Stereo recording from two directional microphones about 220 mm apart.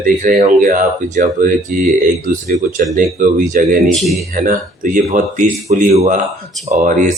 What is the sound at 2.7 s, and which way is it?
Speech, 35° right (ahead or behind).